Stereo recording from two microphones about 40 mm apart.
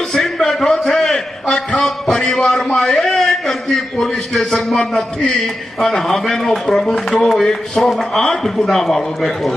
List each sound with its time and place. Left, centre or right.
0.1 s a sound: centre
4.7 s a man's voice: left; by 7.4 s centre
8.2 s a man's voice: left
8.6 s a man's voice: centre